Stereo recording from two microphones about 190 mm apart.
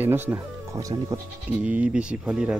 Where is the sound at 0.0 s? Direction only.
10° right (ahead or behind).